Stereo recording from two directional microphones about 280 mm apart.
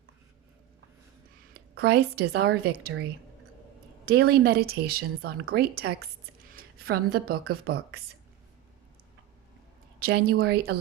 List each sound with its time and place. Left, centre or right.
1.7 s speech: right
4.0 s speech: right
10.0 s speech: right